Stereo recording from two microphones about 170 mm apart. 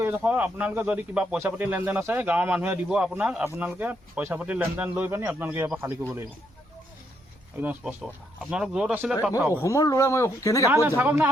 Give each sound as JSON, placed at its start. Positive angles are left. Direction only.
{"t": 0.0, "sound": "speech", "side_deg": -10}
{"t": 7.6, "sound": "speech", "side_deg": -10}
{"t": 9.6, "sound": "speech", "side_deg": 20}
{"t": 10.7, "sound": "speech", "side_deg": -15}